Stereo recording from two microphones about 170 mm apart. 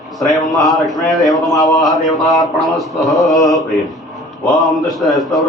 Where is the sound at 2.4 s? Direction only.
Centre (ahead or behind).